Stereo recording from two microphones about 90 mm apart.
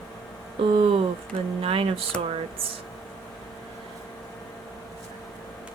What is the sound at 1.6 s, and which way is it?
Speech, 90° right.